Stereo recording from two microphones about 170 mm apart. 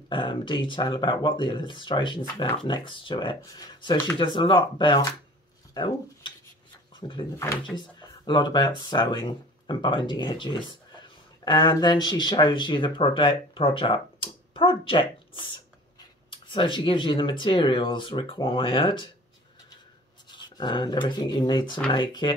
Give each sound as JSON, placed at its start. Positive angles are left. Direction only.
{"t": 0.1, "sound": "speech", "side_deg": 30}
{"t": 8.3, "sound": "speech", "side_deg": 25}
{"t": 20.2, "sound": "speech", "side_deg": 25}